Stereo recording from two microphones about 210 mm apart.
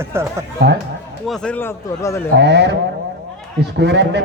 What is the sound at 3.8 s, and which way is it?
Speech, 55° right (ahead or behind).